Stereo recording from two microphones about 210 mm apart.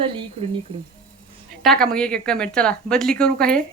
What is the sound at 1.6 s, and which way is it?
A woman's voice, centre (ahead or behind).